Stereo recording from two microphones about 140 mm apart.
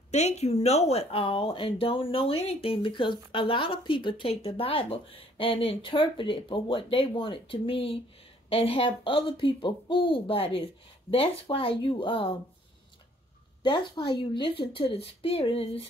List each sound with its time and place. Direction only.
0.1 s speech: 50° left (ahead or behind)
13.6 s speech: 35° left (ahead or behind)